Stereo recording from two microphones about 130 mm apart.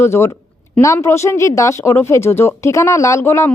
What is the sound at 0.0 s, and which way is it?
Speech, 20° left (ahead or behind).